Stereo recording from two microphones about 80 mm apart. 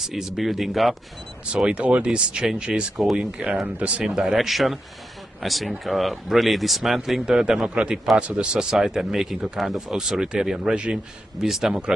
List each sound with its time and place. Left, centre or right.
0.0 s speech: centre
1.4 s speech: centre